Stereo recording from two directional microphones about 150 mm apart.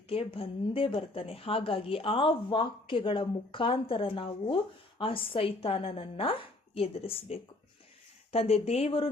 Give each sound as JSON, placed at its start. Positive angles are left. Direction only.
{"t": 0.1, "sound": "a woman's voice", "side_deg": 40}